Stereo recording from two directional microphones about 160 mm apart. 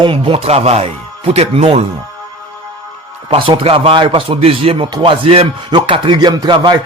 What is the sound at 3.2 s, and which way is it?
Speech, 35° right (ahead or behind).